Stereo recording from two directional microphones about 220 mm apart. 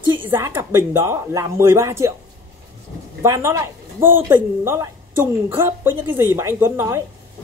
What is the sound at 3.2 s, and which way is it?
Speech, 15° right (ahead or behind).